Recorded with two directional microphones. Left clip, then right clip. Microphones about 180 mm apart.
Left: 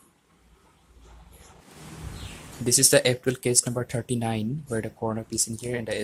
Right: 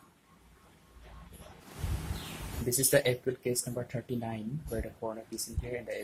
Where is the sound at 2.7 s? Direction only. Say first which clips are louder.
Left 7 dB; 55° left (ahead or behind).